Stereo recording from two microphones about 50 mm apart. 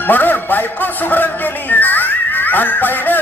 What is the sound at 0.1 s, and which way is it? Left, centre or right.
A man's voice, left.